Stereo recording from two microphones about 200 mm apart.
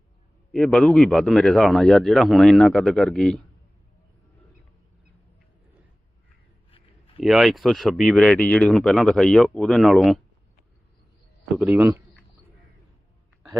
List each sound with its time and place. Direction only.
0.5 s speech: 5° left (ahead or behind)
6.7 s a sound: 25° left (ahead or behind)
7.2 s speech: centre (ahead or behind)
11.5 s a man's voice: 10° right (ahead or behind)